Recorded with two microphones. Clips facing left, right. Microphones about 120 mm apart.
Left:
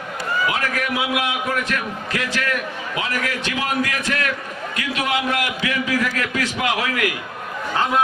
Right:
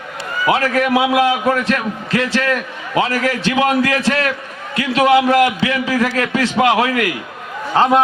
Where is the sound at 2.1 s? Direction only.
30° right (ahead or behind).